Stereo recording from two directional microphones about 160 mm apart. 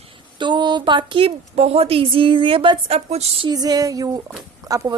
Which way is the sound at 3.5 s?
25° right (ahead or behind).